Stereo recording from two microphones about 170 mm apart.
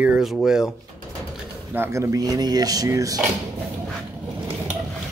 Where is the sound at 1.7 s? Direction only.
15° right (ahead or behind).